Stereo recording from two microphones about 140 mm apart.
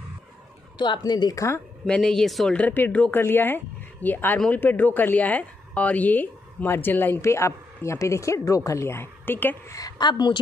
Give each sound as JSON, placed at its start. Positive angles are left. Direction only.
{"t": 0.7, "sound": "speech", "side_deg": 35}
{"t": 1.9, "sound": "speech", "side_deg": 5}
{"t": 9.8, "sound": "speech", "side_deg": 30}